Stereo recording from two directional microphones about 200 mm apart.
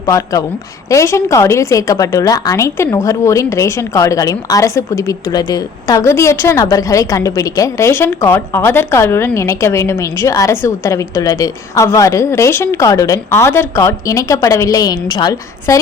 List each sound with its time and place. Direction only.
0.0 s a woman's voice: 15° left (ahead or behind)